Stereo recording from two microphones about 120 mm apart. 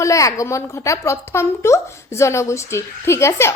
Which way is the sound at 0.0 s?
25° left (ahead or behind).